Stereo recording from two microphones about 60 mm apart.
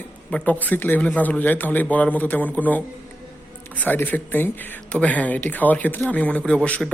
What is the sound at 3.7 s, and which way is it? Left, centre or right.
A man's voice, left.